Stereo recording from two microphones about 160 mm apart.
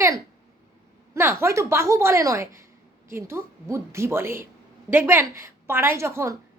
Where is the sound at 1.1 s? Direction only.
15° right (ahead or behind).